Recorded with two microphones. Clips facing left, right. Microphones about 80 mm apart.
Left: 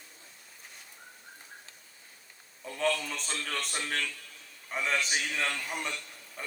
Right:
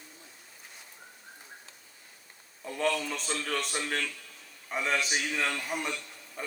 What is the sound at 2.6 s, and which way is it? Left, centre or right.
Speech, centre.